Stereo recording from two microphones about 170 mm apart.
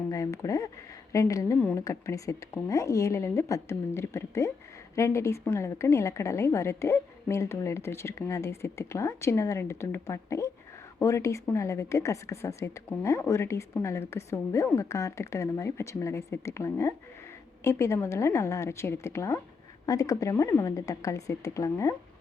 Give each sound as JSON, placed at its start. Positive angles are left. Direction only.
{"t": 0.1, "sound": "a woman's voice", "side_deg": 20}